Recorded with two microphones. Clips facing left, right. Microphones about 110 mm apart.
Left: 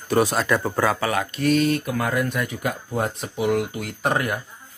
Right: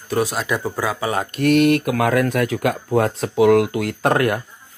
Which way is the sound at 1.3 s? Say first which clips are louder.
Right 7 dB; 60° right (ahead or behind).